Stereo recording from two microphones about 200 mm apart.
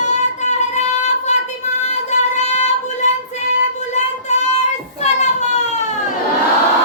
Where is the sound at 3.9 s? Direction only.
35° left (ahead or behind).